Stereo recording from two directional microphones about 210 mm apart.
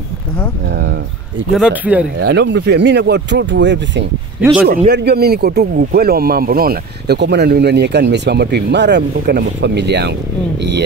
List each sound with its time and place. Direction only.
1.5 s speech: 5° right (ahead or behind)
2.1 s speech: 55° right (ahead or behind)